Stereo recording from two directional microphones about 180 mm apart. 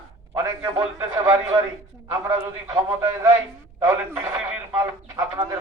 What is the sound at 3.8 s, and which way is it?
Radio, 10° right (ahead or behind).